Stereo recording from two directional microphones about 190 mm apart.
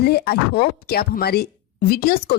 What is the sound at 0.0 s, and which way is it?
Speech, 55° left (ahead or behind).